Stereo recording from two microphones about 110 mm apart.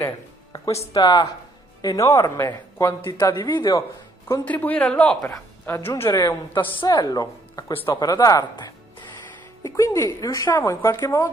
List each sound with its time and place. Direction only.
0.9 s a man's voice: 40° left (ahead or behind)
4.5 s a man's voice: 15° left (ahead or behind)
5.2 s speech: 25° left (ahead or behind)
6.1 s a man's voice: 35° left (ahead or behind)